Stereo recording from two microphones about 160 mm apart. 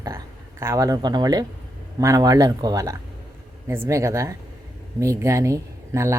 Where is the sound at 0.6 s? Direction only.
20° right (ahead or behind).